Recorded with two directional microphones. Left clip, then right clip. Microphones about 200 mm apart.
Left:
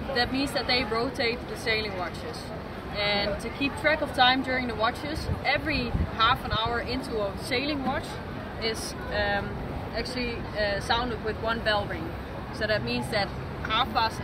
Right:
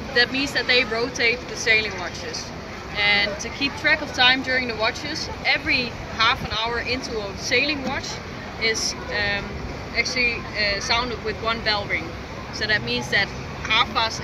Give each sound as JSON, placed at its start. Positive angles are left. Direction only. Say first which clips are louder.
{"t": 0.1, "sound": "speech", "louder": "right 7 dB", "side_deg": 40}
{"t": 3.0, "sound": "speech", "louder": "right 7 dB", "side_deg": 45}